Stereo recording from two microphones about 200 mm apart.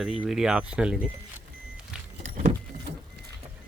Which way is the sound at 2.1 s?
40° right (ahead or behind).